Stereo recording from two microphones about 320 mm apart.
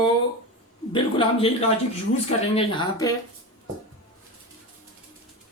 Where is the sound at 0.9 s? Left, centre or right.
Centre.